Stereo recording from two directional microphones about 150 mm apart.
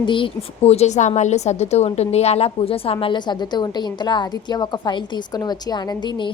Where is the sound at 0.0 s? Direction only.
35° left (ahead or behind).